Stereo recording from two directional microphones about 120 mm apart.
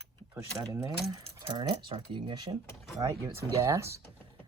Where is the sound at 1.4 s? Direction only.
45° right (ahead or behind).